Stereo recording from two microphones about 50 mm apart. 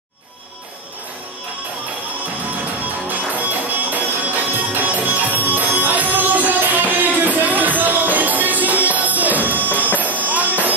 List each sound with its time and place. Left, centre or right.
3.1 s music: right